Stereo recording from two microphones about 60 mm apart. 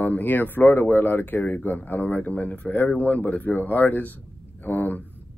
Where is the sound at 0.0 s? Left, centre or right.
Left.